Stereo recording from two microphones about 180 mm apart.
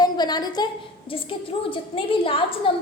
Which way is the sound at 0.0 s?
25° left (ahead or behind).